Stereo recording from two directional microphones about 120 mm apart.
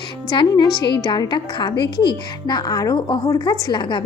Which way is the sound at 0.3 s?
35° left (ahead or behind).